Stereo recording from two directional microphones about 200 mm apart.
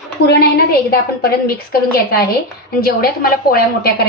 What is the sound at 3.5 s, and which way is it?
Speech, 50° left (ahead or behind).